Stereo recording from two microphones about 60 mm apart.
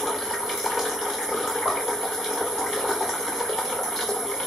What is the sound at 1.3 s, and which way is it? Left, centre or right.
Water, centre.